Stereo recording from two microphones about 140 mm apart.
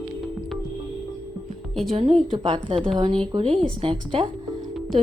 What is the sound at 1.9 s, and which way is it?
A woman's voice, 45° right (ahead or behind).